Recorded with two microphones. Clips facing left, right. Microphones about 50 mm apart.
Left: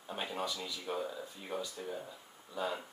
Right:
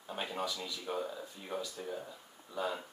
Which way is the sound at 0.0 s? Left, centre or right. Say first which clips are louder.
Even; centre.